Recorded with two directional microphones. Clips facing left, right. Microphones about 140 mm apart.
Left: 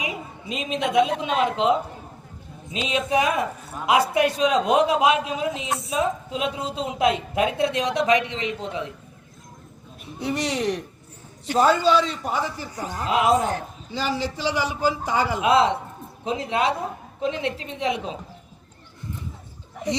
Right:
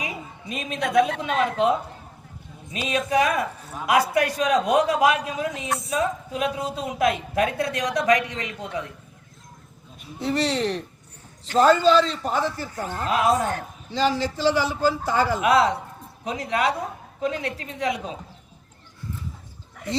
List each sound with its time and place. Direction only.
0.0 s a woman's voice: 20° left (ahead or behind)
2.7 s a man's voice: 25° left (ahead or behind)
10.2 s a man's voice: 10° left (ahead or behind)
13.9 s a man's voice: 10° left (ahead or behind)
15.4 s a man's voice: 25° left (ahead or behind)